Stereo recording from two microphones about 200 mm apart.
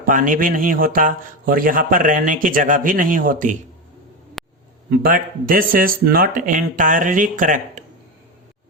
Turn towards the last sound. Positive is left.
turn(degrees=-40)  # may be behind; listen again after turning